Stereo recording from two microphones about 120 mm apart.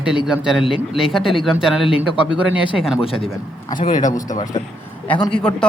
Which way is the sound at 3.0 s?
50° left (ahead or behind).